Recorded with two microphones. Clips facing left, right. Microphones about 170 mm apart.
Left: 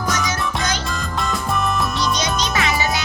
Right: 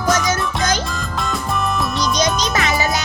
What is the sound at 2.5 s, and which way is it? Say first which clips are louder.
Music: right 2 dB; 40° right (ahead or behind).